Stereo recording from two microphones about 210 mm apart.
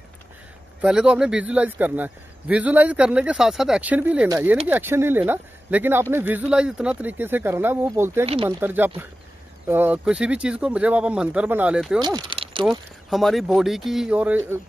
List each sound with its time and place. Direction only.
0.7 s a man's voice: 5° right (ahead or behind)
12.0 s speech: 20° right (ahead or behind)
12.6 s speech: centre (ahead or behind)